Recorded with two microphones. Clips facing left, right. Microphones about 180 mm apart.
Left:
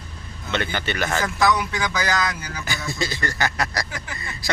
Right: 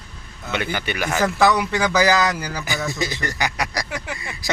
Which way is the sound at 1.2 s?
65° right (ahead or behind).